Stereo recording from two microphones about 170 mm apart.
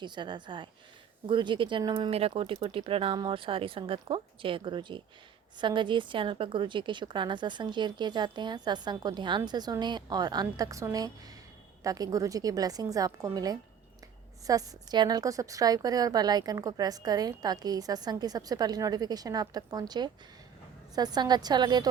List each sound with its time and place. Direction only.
0.0 s a woman's voice: 25° right (ahead or behind)
2.0 s a woman's voice: 35° right (ahead or behind)